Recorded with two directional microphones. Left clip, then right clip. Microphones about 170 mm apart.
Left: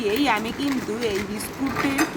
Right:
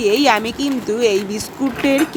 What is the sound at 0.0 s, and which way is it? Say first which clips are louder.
Speech: right 8 dB; 35° right (ahead or behind).